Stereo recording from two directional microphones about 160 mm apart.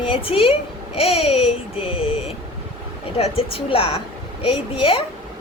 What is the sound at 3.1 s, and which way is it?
A woman's voice, 35° left (ahead or behind).